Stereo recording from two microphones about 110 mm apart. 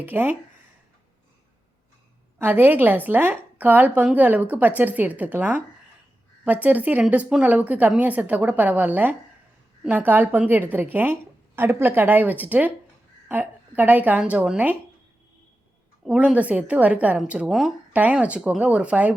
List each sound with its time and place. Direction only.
0.0 s a woman's voice: 20° right (ahead or behind)
2.4 s a woman's voice: 20° right (ahead or behind)
16.0 s a woman's voice: 15° right (ahead or behind)